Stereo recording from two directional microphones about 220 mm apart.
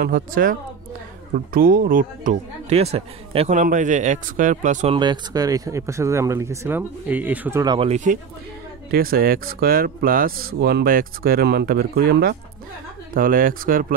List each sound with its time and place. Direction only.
0.0 s speech: 40° right (ahead or behind)
4.9 s speech: 20° right (ahead or behind)
7.6 s speech: 20° right (ahead or behind); by 13.9 s 40° right (ahead or behind)